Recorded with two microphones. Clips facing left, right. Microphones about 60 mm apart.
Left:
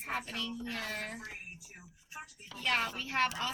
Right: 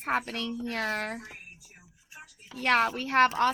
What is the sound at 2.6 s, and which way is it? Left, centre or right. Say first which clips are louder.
Speech: right 8 dB; right.